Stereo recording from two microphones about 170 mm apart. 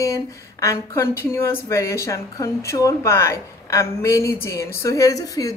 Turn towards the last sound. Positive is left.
turn(degrees=20)  # may be behind; listen again after turning